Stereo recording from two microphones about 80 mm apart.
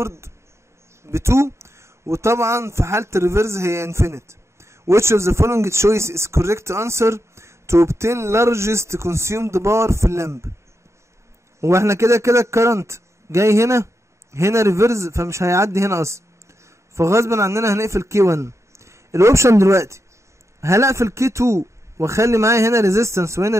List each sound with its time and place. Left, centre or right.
0.0 s speech: right
11.6 s a man's voice: right